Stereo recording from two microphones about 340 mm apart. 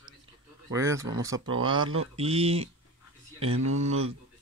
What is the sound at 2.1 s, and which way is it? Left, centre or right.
Speech, centre.